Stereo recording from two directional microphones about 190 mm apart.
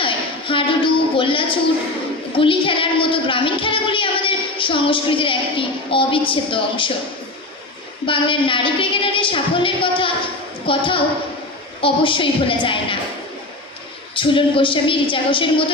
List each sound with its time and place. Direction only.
0.0 s a sound: 25° left (ahead or behind)
2.3 s a woman's voice: 25° left (ahead or behind)
8.0 s a woman's voice: 25° left (ahead or behind)
14.2 s a woman's voice: 25° left (ahead or behind)